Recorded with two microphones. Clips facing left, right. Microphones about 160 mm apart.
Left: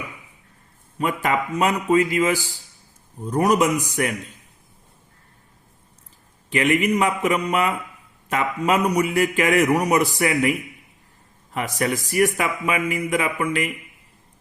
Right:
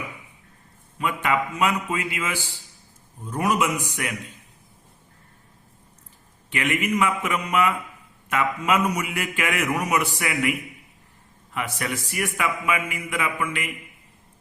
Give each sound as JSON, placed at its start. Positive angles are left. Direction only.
{"t": 0.9, "sound": "a man's voice", "side_deg": 40}
{"t": 6.5, "sound": "a man's voice", "side_deg": 35}